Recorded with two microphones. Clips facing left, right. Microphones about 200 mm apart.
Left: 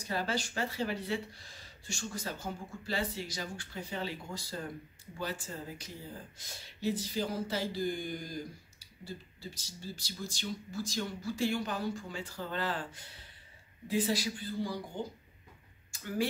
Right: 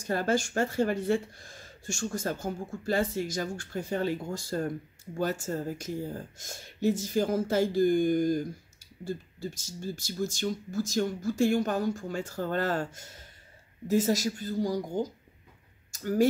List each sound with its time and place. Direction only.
0.0 s speech: 50° right (ahead or behind)